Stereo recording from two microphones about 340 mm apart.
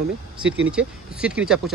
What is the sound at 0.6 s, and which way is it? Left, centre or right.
A man's voice, centre.